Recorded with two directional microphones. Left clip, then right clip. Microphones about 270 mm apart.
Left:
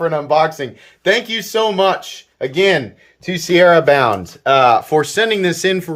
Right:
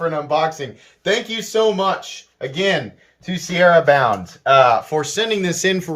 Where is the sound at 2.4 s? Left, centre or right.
Left.